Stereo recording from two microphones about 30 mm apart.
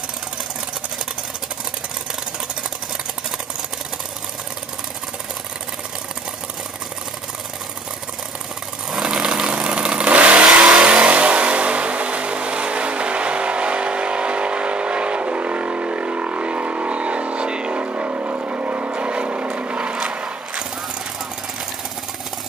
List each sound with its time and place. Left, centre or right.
8.9 s vehicle: centre
9.5 s engine: right
10.1 s vehicle: right
10.4 s vehicle: centre
11.1 s vehicle: right
17.7 s vehicle: right
18.9 s vehicle: right
20.2 s a sound: right